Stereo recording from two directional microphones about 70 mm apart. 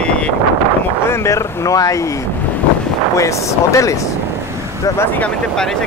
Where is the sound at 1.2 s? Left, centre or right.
Left.